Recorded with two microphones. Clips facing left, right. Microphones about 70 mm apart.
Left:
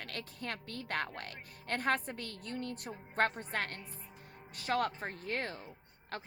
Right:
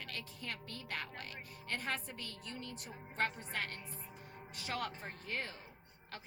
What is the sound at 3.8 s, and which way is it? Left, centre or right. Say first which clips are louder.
Music: right 1 dB; centre.